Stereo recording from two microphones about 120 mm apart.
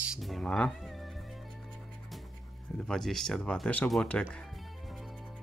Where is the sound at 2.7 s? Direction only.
5° left (ahead or behind).